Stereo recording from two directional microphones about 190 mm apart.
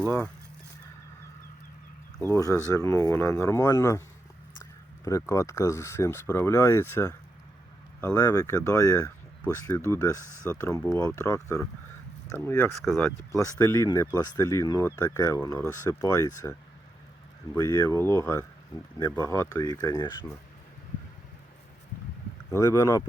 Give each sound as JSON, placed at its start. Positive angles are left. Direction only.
{"t": 2.2, "sound": "speech", "side_deg": 15}
{"t": 4.6, "sound": "a sound", "side_deg": 15}
{"t": 5.3, "sound": "speech", "side_deg": 15}
{"t": 17.6, "sound": "speech", "side_deg": 15}
{"t": 18.9, "sound": "speech", "side_deg": 20}
{"t": 22.4, "sound": "speech", "side_deg": 15}